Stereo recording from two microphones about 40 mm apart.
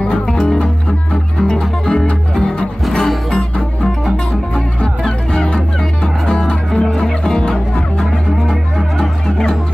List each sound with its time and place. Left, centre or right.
0.3 s music: centre
1.5 s music: left
2.9 s music: centre
3.3 s music: left
5.0 s music: left